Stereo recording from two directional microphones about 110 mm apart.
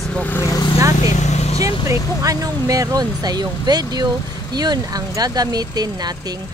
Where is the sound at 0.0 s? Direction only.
10° left (ahead or behind).